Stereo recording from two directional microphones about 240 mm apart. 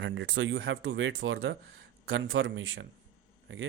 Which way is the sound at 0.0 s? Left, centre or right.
Right.